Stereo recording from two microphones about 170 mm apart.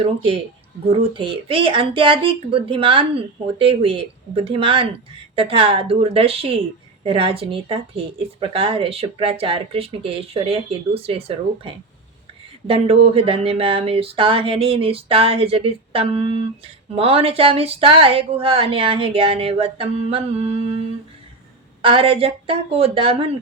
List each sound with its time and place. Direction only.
0.0 s speech: 30° right (ahead or behind)